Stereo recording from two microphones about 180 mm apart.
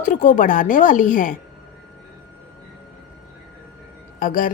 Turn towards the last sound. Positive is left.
turn(degrees=50)  # may be behind; listen again after turning